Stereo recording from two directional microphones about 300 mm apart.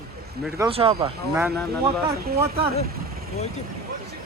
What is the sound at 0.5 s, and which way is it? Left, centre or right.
Speech, centre.